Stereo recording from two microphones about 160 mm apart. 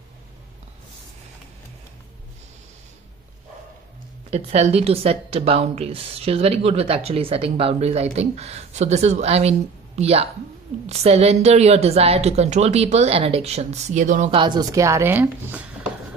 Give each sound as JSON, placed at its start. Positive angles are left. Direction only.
{"t": 4.3, "sound": "a woman's voice", "side_deg": -45}
{"t": 14.3, "sound": "a woman's voice", "side_deg": -30}